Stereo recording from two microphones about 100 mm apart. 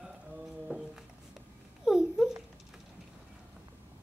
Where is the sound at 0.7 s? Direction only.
15° right (ahead or behind).